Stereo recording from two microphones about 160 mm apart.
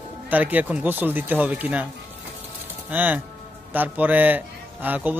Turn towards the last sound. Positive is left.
turn(degrees=-10)  # may be behind; listen again after turning